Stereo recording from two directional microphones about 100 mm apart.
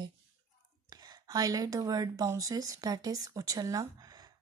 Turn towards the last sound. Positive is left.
turn(degrees=-35)  # may be behind; listen again after turning